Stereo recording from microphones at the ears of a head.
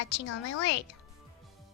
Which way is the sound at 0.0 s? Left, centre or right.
Left.